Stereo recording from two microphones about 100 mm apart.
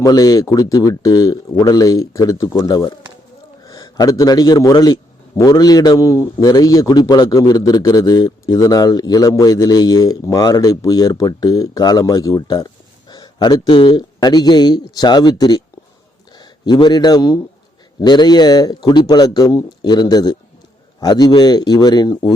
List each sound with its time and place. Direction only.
0.0 s a man's voice: 40° left (ahead or behind)
6.1 s a man's voice: 30° left (ahead or behind)